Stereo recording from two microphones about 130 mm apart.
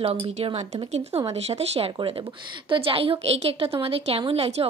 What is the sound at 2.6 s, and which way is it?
Speech, 45° right (ahead or behind).